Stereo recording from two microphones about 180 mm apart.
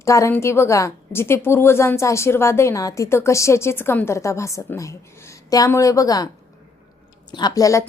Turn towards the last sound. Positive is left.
turn(degrees=20)  # may be behind; listen again after turning